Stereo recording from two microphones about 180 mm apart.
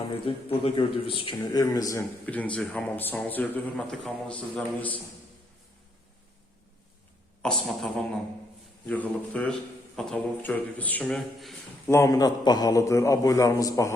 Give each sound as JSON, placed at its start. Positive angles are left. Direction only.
{"t": 0.1, "sound": "a man's voice", "side_deg": 30}
{"t": 1.4, "sound": "a man's voice", "side_deg": 20}
{"t": 7.4, "sound": "a man's voice", "side_deg": 0}
{"t": 11.9, "sound": "a man's voice", "side_deg": 15}